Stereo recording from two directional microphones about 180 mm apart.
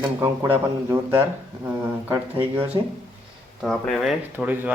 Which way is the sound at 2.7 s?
20° right (ahead or behind).